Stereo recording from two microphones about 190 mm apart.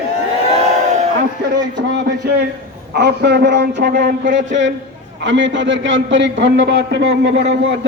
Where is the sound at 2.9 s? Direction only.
60° right (ahead or behind).